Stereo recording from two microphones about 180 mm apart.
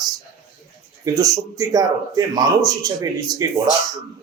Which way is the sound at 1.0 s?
20° right (ahead or behind).